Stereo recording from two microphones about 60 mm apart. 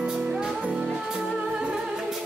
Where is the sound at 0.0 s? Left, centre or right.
Centre.